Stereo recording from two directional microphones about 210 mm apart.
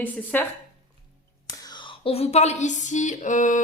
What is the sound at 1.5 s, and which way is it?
Speech, 20° left (ahead or behind).